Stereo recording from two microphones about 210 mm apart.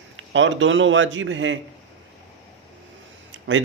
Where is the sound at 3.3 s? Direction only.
65° right (ahead or behind).